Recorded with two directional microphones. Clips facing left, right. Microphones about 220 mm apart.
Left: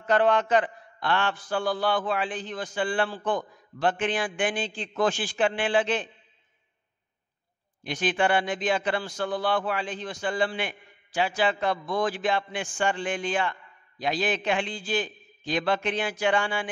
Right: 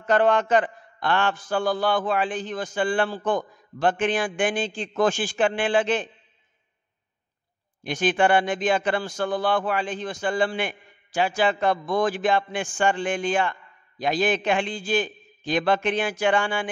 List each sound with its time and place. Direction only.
0.0 s a man's voice: 45° right (ahead or behind)
7.8 s a man's voice: 45° right (ahead or behind)